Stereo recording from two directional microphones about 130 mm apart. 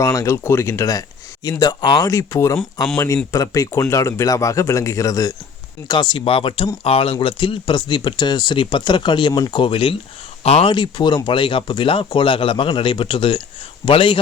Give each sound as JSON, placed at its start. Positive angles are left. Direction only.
{"t": 0.0, "sound": "speech", "side_deg": 25}